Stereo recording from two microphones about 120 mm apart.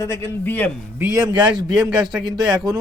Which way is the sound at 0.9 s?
25° right (ahead or behind).